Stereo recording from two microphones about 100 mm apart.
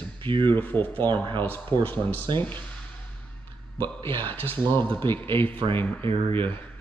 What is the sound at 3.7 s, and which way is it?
Speech, 20° left (ahead or behind).